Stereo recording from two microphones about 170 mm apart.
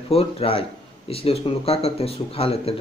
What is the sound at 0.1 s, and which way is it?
A man's voice, 35° left (ahead or behind).